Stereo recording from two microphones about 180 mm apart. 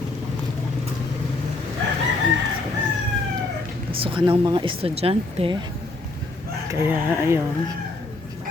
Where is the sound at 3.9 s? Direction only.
30° right (ahead or behind).